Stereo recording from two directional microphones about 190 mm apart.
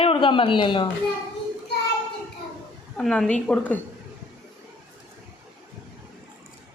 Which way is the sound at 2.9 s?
Centre (ahead or behind).